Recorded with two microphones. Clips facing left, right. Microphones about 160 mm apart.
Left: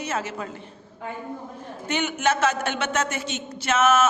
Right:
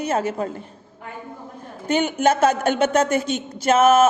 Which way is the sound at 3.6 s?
35° right (ahead or behind).